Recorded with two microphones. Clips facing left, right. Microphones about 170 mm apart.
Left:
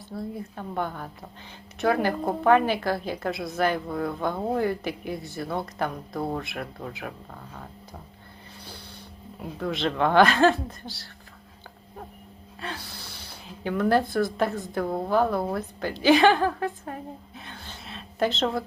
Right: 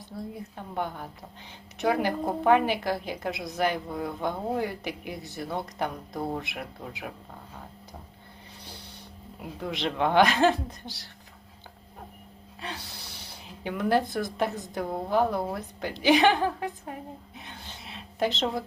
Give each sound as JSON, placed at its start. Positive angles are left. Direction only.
{"t": 0.5, "sound": "a woman's voice", "side_deg": -15}
{"t": 9.6, "sound": "a woman's voice", "side_deg": -15}
{"t": 12.5, "sound": "a woman's voice", "side_deg": -20}
{"t": 17.3, "sound": "a sound", "side_deg": -20}